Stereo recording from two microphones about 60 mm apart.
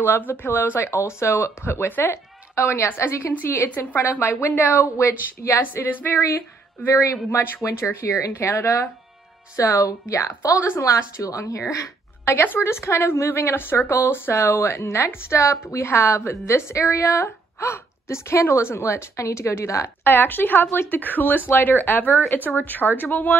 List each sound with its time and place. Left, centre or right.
0.0 s a woman's voice: left
1.9 s speech: left
2.5 s a woman's voice: left
3.7 s speech: left
4.8 s a woman's voice: left
5.6 s speech: left
7.2 s speech: left
7.6 s a woman's voice: left
9.8 s a woman's voice: left
12.3 s a woman's voice: left
20.0 s speech: left